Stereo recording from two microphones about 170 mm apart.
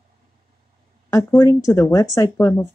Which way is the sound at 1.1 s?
20° left (ahead or behind).